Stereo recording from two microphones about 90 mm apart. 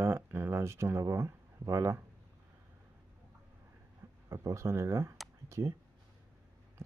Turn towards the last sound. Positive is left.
turn(degrees=-35)  # may be behind; listen again after turning